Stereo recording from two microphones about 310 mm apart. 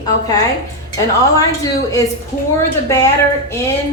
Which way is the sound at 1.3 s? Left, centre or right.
Centre.